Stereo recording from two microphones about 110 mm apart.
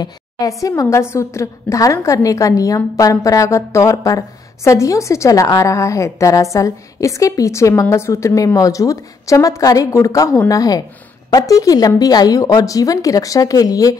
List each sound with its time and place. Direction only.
0.0 s a woman's voice: 30° left (ahead or behind)